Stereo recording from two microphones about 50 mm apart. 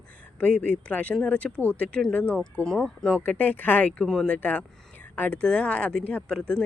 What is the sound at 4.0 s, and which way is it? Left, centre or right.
Speech, centre.